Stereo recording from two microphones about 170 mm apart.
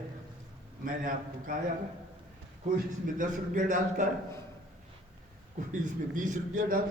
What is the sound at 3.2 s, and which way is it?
Speech, 50° right (ahead or behind).